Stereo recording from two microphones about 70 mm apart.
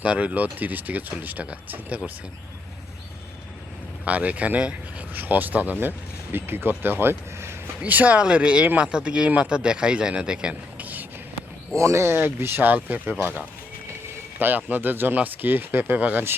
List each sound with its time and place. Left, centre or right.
0.0 s speech: centre
4.0 s speech: right
7.9 s speech: right
11.8 s speech: right